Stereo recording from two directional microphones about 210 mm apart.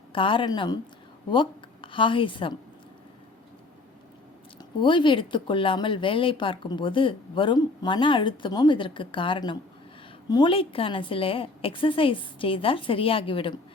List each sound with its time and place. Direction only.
0.1 s a woman's voice: 25° left (ahead or behind)
4.8 s speech: 25° left (ahead or behind)